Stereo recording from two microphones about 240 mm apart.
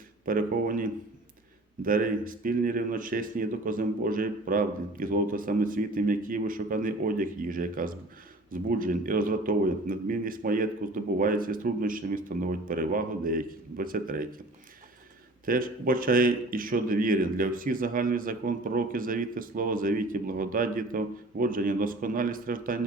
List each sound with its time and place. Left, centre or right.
0.3 s a man's voice: right
15.4 s a man's voice: right